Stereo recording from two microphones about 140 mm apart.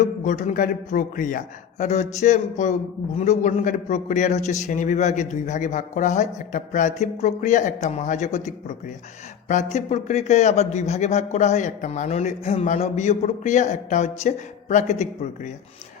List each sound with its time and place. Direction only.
0.3 s a man's voice: 70° left (ahead or behind)